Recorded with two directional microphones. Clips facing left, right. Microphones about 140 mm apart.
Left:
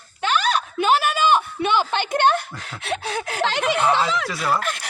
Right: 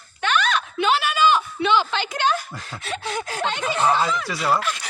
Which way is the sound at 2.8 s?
70° left (ahead or behind).